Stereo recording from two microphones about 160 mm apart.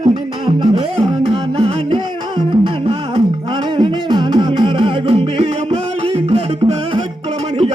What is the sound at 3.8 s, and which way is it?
Music, 25° right (ahead or behind).